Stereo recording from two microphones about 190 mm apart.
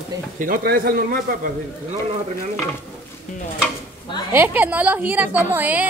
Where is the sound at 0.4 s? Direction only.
50° right (ahead or behind).